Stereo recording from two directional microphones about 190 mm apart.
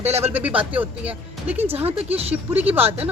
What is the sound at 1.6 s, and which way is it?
Speech, 30° right (ahead or behind).